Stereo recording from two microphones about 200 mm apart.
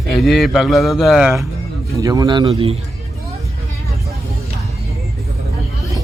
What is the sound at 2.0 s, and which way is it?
Speech, 15° right (ahead or behind).